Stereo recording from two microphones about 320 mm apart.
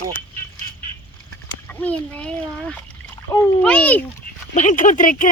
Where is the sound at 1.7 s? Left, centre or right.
Centre.